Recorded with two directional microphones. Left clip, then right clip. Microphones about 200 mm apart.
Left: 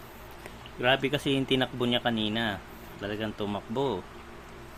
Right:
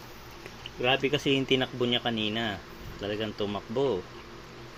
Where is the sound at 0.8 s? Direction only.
15° left (ahead or behind).